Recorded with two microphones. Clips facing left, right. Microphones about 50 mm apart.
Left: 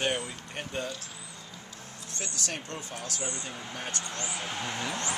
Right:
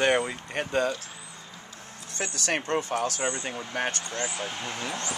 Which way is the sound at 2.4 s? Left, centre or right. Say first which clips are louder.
Right 9 dB; right.